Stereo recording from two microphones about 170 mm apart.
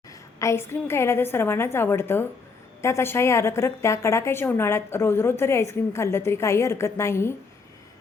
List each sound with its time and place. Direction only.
0.3 s a woman's voice: 15° left (ahead or behind)